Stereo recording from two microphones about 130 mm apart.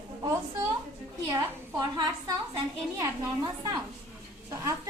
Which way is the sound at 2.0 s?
30° right (ahead or behind).